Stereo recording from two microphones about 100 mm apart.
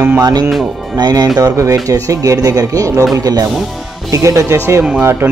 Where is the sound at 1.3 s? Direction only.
35° right (ahead or behind).